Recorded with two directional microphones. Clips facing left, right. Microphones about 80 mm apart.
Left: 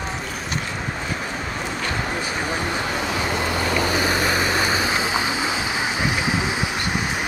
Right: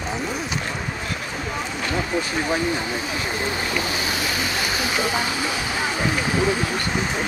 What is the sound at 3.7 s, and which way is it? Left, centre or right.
Vehicle, left.